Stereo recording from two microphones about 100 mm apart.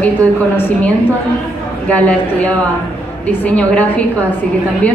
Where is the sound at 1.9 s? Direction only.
15° left (ahead or behind).